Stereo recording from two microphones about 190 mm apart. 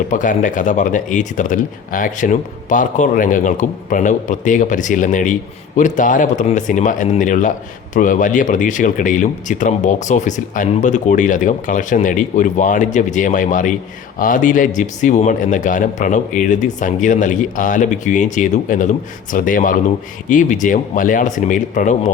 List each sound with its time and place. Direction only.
0.1 s speech: 45° left (ahead or behind)